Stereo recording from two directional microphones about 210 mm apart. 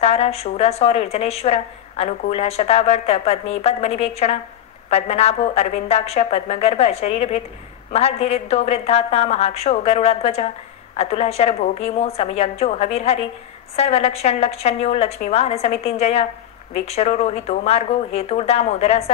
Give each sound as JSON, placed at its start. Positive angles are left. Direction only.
{"t": 0.0, "sound": "a woman's voice", "side_deg": 30}